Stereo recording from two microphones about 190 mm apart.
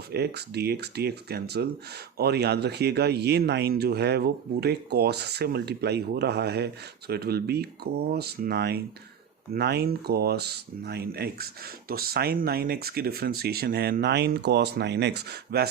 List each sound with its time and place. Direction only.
0.1 s speech: 60° right (ahead or behind)